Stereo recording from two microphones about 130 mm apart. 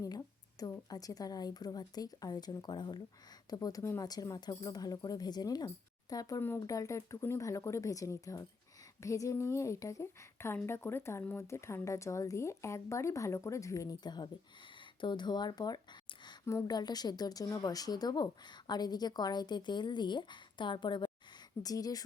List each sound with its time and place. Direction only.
0.0 s a woman's voice: 25° left (ahead or behind)